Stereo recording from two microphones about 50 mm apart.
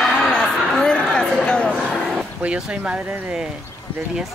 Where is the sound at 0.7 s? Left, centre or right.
Centre.